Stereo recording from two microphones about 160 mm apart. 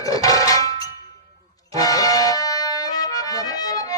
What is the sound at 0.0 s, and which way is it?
Clang, 20° left (ahead or behind).